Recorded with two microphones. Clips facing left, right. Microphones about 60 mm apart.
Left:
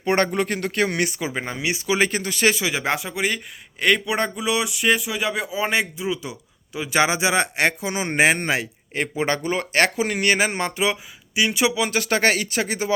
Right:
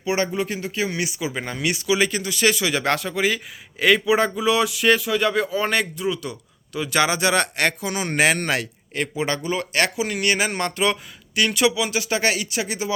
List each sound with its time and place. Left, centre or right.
0.0 s speech: left
1.3 s speech: left
1.9 s speech: left; by 3.2 s centre
3.2 s speech: centre; by 10.6 s left
10.6 s speech: centre
11.8 s speech: left